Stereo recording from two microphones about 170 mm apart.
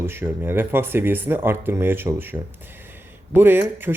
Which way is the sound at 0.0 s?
15° right (ahead or behind).